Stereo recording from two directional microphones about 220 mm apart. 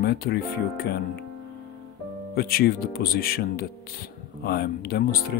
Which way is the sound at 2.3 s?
45° left (ahead or behind).